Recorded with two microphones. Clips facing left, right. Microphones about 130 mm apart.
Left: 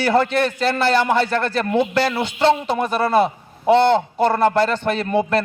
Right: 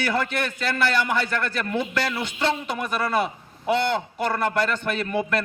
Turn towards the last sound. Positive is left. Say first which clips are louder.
# left 6 dB
turn(degrees=30)  # may be behind; listen again after turning